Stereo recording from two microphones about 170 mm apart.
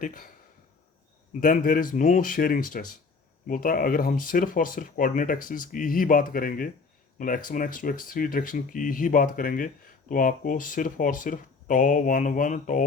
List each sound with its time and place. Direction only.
0.0 s speech: 55° left (ahead or behind)
1.4 s speech: 55° left (ahead or behind)